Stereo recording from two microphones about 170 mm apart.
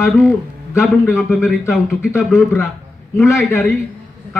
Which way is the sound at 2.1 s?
15° left (ahead or behind).